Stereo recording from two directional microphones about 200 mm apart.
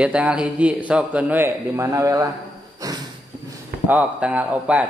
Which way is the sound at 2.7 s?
15° right (ahead or behind).